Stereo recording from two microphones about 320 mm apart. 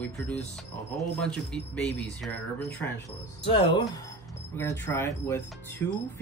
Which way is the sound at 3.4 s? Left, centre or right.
Centre.